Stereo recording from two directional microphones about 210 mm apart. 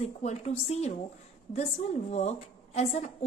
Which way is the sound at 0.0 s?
30° left (ahead or behind).